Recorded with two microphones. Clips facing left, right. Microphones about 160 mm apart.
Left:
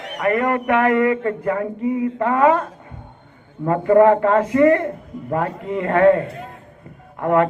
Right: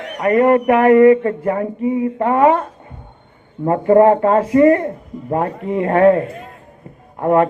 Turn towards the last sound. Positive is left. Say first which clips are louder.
# right 3 dB
turn(degrees=-30)  # may be behind; listen again after turning